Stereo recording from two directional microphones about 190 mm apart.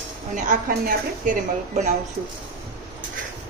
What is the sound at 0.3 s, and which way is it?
Speech, 45° right (ahead or behind).